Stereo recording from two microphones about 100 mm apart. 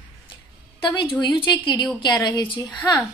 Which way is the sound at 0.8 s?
50° left (ahead or behind).